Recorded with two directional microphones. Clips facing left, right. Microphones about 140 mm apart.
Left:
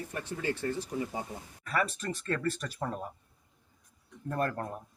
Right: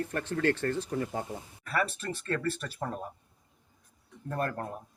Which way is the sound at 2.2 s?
40° right (ahead or behind).